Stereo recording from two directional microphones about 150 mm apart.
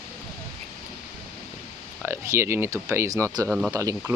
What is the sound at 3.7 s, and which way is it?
Speech, 20° right (ahead or behind).